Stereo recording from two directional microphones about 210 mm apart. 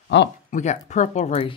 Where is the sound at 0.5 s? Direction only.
35° left (ahead or behind).